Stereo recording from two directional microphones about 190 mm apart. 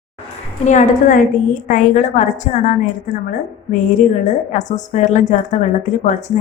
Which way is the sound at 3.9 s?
40° left (ahead or behind).